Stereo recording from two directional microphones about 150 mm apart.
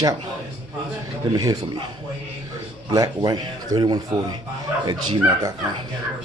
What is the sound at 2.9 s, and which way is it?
A man's voice, 30° right (ahead or behind).